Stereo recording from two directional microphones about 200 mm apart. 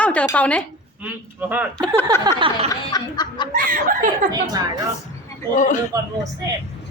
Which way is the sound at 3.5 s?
45° right (ahead or behind).